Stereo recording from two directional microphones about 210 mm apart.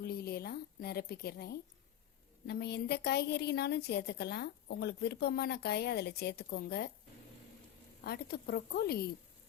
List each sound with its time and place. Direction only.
0.0 s a sound: 50° left (ahead or behind)
2.5 s a woman's voice: 50° left (ahead or behind)
8.0 s a woman's voice: 50° left (ahead or behind)